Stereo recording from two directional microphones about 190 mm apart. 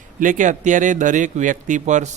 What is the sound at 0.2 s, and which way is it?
A man's voice, 40° right (ahead or behind).